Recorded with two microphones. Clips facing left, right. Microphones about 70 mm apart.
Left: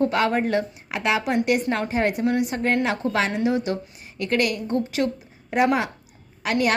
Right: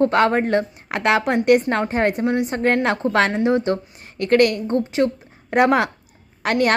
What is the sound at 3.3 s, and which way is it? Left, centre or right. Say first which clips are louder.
A woman's voice: right 4 dB; right.